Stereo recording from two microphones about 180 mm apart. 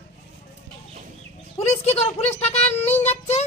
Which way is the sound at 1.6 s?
35° left (ahead or behind).